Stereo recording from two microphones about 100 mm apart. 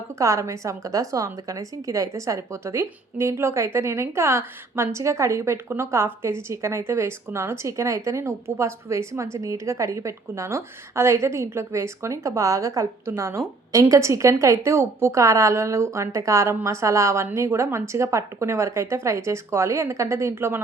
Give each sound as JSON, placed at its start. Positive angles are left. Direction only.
{"t": 0.2, "sound": "a woman's voice", "side_deg": -30}